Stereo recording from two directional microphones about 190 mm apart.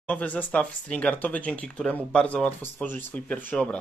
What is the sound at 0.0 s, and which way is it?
Speech, 5° left (ahead or behind).